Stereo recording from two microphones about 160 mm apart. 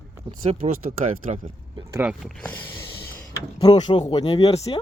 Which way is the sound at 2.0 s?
5° right (ahead or behind).